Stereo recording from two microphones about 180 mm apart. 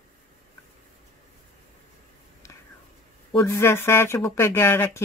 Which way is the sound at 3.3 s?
15° left (ahead or behind).